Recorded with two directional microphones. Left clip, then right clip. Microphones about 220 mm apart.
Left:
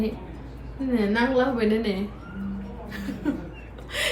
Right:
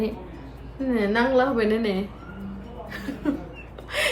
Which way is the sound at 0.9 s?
20° right (ahead or behind).